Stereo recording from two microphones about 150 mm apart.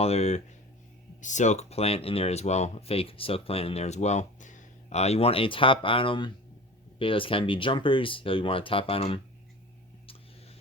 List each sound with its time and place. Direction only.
0.0 s speech: 45° left (ahead or behind)